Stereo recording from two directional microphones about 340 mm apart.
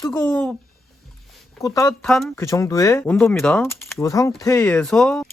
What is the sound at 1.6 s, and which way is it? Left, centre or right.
Speech, centre.